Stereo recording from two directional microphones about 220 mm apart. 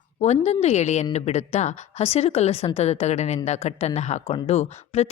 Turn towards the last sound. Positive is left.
turn(degrees=30)  # may be behind; listen again after turning